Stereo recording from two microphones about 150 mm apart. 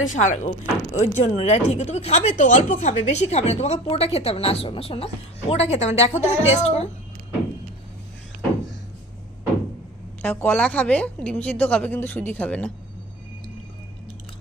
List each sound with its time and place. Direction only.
0.1 s speech: 55° left (ahead or behind)
10.2 s a woman's voice: 10° left (ahead or behind)